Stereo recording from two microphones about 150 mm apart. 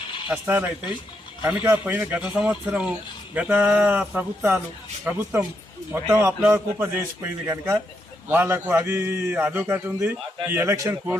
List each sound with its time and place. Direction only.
0.3 s a man's voice: 10° right (ahead or behind)